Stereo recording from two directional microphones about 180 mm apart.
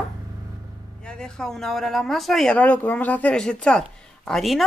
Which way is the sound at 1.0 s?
5° left (ahead or behind).